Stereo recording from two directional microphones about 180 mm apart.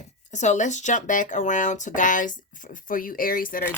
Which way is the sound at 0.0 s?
40° left (ahead or behind).